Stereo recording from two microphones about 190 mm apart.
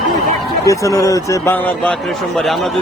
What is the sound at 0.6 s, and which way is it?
A man's voice, 15° left (ahead or behind).